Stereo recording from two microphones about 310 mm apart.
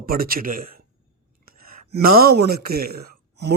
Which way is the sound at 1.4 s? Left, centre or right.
Right.